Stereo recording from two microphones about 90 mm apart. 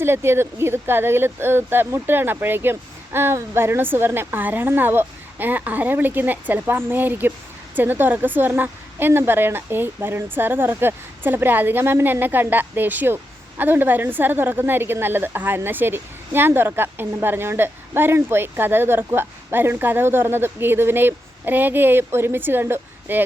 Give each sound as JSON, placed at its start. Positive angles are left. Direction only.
{"t": 0.0, "sound": "a woman's voice", "side_deg": -25}